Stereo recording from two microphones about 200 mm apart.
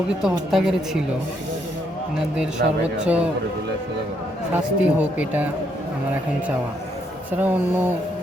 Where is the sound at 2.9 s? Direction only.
5° right (ahead or behind).